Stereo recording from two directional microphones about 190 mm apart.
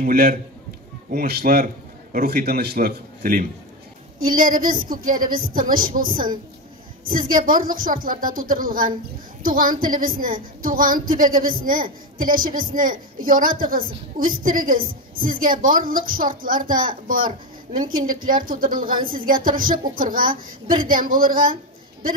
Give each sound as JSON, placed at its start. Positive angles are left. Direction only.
{"t": 0.0, "sound": "a woman's voice", "side_deg": -50}